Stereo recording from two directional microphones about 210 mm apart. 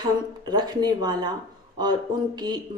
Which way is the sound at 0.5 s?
20° right (ahead or behind).